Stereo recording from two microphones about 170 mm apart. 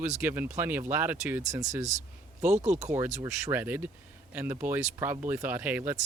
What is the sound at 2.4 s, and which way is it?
Speech, 40° right (ahead or behind).